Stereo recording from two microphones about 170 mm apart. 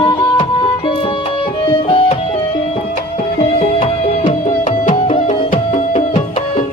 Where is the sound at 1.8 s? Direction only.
30° left (ahead or behind).